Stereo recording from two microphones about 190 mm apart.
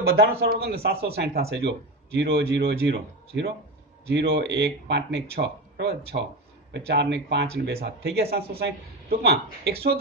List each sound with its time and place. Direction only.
0.0 s speech: 55° right (ahead or behind)